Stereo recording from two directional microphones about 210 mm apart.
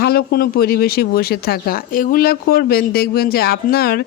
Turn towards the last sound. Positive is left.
turn(degrees=45)  # may be behind; listen again after turning